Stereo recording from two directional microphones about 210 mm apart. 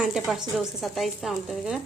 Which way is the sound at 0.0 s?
Centre (ahead or behind).